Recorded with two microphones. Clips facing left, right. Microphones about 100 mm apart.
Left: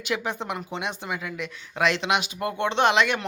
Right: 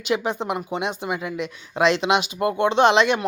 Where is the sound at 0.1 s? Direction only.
20° right (ahead or behind).